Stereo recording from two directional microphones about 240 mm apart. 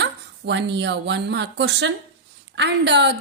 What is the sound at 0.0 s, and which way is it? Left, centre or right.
Speech, right.